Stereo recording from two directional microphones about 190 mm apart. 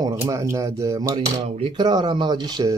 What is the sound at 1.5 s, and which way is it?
Speech, 30° right (ahead or behind).